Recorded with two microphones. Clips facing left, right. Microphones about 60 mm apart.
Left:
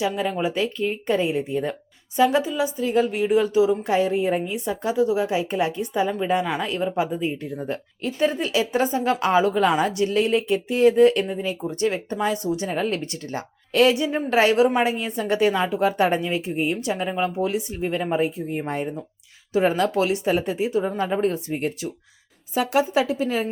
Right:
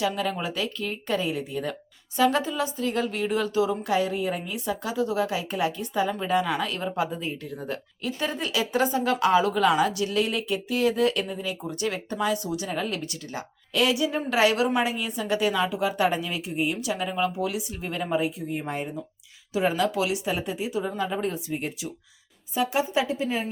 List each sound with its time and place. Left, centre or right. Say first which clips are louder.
0.0 s a woman's voice: left 3 dB; left
3.9 s a woman's voice: left 5 dB; left
14.8 s speech: left 4 dB; left
22.5 s speech: left 4 dB; left